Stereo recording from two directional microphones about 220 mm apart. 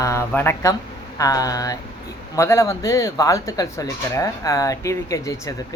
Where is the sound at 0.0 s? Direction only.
15° left (ahead or behind).